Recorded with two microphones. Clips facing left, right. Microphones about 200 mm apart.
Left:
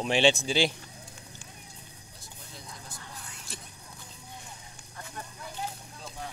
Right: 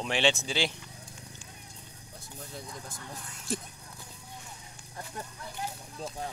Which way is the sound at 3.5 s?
50° right (ahead or behind).